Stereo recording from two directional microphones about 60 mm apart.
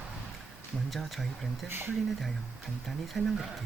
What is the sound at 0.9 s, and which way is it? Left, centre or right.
Speech, centre.